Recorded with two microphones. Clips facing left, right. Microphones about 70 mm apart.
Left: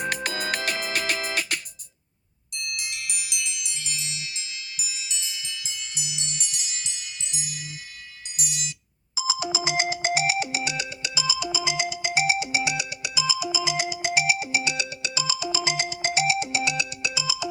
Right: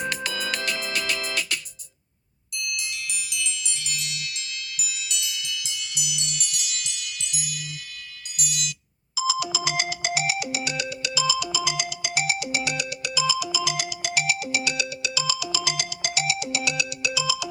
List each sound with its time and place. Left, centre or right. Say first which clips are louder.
0.0 s music: left 1 dB; left
2.6 s chime: right 2 dB; left
3.8 s music: right 2 dB; left
9.1 s ringtone: right 3 dB; left
9.9 s music: left 3 dB; left
11.3 s ringtone: even; centre
11.8 s music: left 3 dB; left